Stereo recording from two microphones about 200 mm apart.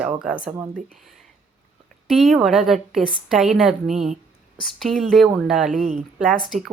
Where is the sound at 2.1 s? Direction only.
Centre (ahead or behind).